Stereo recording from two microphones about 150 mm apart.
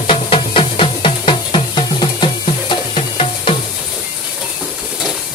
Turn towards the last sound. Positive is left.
turn(degrees=35)  # may be behind; listen again after turning